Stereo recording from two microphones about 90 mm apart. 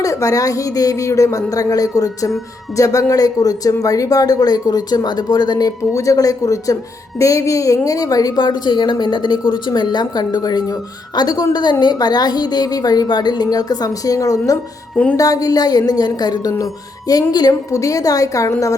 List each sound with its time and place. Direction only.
0.0 s a woman's voice: 40° left (ahead or behind)
5.9 s a woman's voice: 35° left (ahead or behind)